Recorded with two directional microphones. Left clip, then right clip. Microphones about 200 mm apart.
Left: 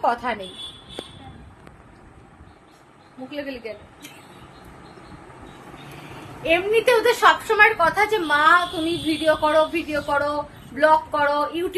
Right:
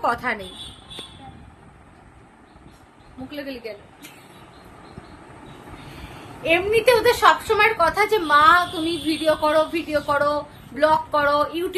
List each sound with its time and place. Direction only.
0.0 s a woman's voice: 10° right (ahead or behind)
3.3 s a woman's voice: 10° right (ahead or behind)
6.4 s a woman's voice: 15° right (ahead or behind)